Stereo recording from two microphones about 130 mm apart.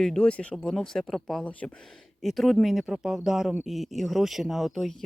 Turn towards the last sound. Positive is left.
turn(degrees=0)  # may be behind; listen again after turning